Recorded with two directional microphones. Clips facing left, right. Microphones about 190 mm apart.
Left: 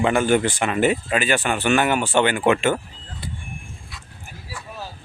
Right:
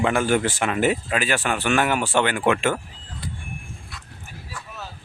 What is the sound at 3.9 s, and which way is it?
Dog, centre (ahead or behind).